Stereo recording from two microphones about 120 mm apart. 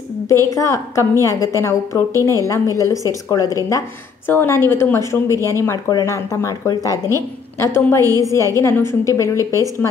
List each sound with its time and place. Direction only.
0.5 s a woman's voice: 25° left (ahead or behind)
2.1 s a woman's voice: 25° right (ahead or behind)
2.4 s a woman's voice: 25° left (ahead or behind)